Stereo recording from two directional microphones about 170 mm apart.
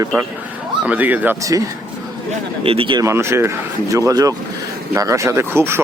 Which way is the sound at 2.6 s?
30° right (ahead or behind).